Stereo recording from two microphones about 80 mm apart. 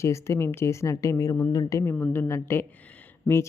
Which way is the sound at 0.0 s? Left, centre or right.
Left.